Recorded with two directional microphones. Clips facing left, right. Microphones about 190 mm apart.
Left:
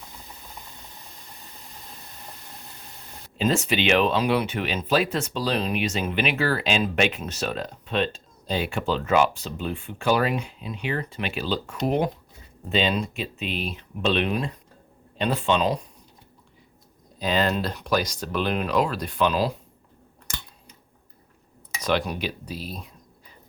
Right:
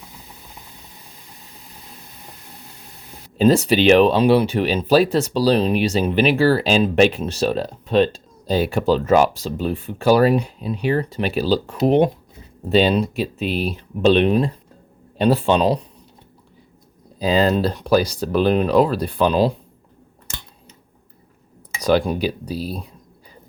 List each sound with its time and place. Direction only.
3.3 s speech: 35° right (ahead or behind)
12.6 s speech: 40° right (ahead or behind)
17.2 s speech: 35° right (ahead or behind)
21.8 s speech: 35° right (ahead or behind)